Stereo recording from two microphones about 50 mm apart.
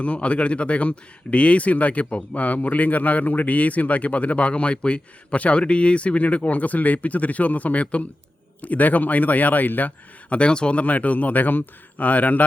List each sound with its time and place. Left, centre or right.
0.0 s speech: left